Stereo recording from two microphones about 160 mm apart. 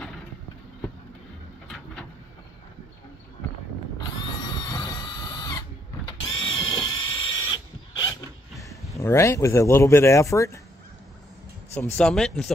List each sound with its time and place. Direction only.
4.0 s drill: 25° left (ahead or behind)
8.9 s speech: 20° left (ahead or behind)
11.7 s speech: 10° left (ahead or behind)